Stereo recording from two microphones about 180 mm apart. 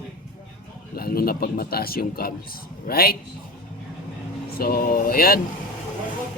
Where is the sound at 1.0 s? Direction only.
55° left (ahead or behind).